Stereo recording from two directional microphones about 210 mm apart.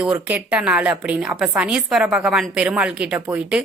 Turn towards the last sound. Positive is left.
turn(degrees=-5)  # may be behind; listen again after turning